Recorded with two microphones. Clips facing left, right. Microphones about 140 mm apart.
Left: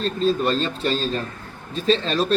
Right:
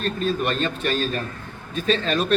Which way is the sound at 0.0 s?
30° left (ahead or behind).